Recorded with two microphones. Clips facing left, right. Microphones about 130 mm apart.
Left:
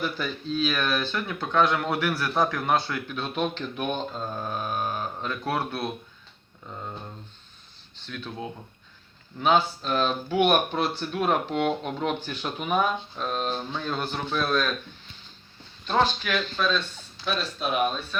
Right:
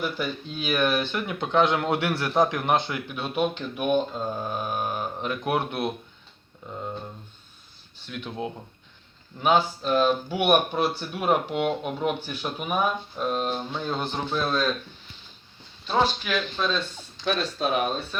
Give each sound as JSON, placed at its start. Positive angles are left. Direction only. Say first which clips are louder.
{"t": 0.0, "sound": "speech", "louder": "right 1 dB", "side_deg": -15}
{"t": 7.9, "sound": "speech", "louder": "right 1 dB", "side_deg": -10}
{"t": 9.4, "sound": "speech", "louder": "even", "side_deg": -15}
{"t": 15.9, "sound": "speech", "louder": "even", "side_deg": -15}
{"t": 17.2, "sound": "a sound", "louder": "right 3 dB", "side_deg": 5}